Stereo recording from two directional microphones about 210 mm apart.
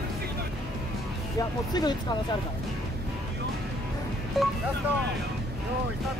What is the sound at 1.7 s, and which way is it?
Speech, 20° left (ahead or behind).